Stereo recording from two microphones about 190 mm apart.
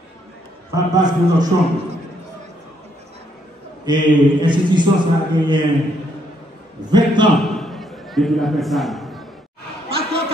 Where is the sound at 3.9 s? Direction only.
25° right (ahead or behind).